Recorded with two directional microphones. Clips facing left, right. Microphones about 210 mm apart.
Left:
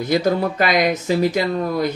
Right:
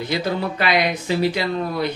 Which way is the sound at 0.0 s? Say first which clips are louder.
Left 5 dB; 45° left (ahead or behind).